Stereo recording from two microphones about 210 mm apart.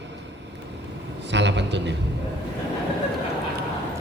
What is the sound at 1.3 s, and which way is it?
Speech, 55° right (ahead or behind).